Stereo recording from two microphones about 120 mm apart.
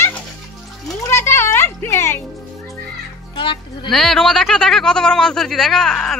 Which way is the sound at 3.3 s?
40° left (ahead or behind).